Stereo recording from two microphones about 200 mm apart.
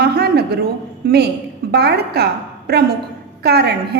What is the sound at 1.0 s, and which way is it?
A woman's voice, 55° right (ahead or behind).